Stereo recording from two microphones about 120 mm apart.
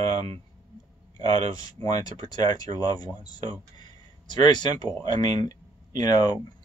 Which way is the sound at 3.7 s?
35° left (ahead or behind).